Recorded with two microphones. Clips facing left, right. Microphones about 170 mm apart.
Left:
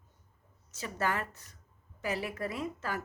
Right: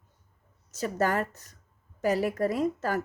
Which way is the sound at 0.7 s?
40° right (ahead or behind).